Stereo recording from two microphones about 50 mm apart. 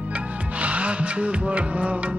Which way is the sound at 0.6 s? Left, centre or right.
Right.